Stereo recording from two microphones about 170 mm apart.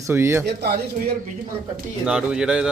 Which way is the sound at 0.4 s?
65° right (ahead or behind).